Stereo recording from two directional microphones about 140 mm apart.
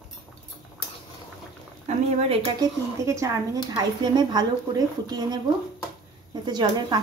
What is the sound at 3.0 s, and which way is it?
A woman's voice, 20° right (ahead or behind).